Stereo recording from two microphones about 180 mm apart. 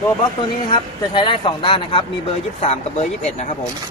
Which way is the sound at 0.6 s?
25° left (ahead or behind).